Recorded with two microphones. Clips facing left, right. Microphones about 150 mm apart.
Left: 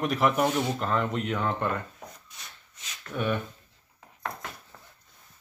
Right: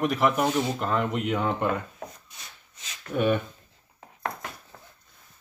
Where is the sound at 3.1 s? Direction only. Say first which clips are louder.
Right 5 dB; 20° right (ahead or behind).